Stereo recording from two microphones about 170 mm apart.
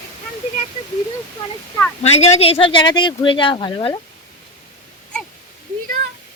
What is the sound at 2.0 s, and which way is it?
Speech, 40° left (ahead or behind).